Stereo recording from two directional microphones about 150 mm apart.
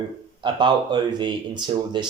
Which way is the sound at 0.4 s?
30° right (ahead or behind).